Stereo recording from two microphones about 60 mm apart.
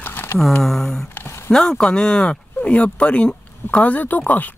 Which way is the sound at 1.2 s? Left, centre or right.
Left.